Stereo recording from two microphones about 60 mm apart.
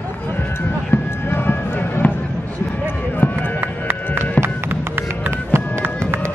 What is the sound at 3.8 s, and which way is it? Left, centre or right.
Music, right.